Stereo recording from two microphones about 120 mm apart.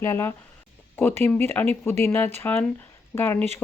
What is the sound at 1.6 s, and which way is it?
Speech, 15° left (ahead or behind).